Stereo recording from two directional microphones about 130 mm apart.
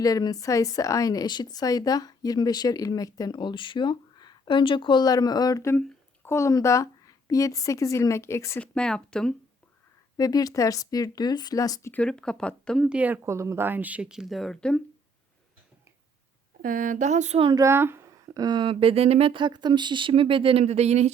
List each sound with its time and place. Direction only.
0.0 s a woman's voice: 30° left (ahead or behind)
8.6 s speech: 5° left (ahead or behind)
10.2 s a woman's voice: 30° left (ahead or behind)
11.9 s speech: 10° left (ahead or behind)
12.8 s speech: 10° right (ahead or behind)
16.6 s speech: 90° right; by 17.4 s 60° right (ahead or behind)
17.4 s speech: 30° right (ahead or behind)
18.3 s speech: 35° right (ahead or behind); by 21.1 s 55° right (ahead or behind)